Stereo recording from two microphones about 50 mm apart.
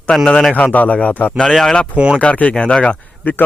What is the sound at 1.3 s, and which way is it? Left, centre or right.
Speech, centre.